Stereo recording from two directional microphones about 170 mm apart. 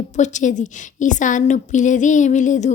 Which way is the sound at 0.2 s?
45° left (ahead or behind).